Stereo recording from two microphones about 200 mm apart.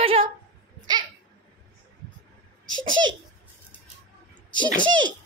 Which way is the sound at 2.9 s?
70° right (ahead or behind).